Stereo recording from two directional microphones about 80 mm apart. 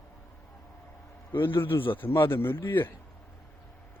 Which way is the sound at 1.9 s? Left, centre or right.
Left.